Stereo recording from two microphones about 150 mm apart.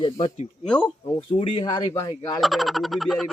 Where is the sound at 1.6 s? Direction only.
25° left (ahead or behind).